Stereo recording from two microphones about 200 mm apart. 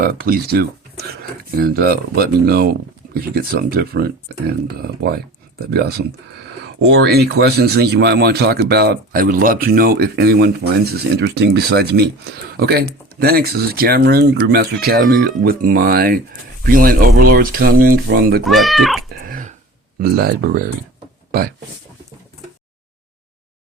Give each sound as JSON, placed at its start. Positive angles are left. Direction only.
{"t": 0.0, "sound": "speech", "side_deg": -45}
{"t": 18.4, "sound": "speech", "side_deg": 0}
{"t": 19.3, "sound": "a sound", "side_deg": -40}
{"t": 20.0, "sound": "speech", "side_deg": -50}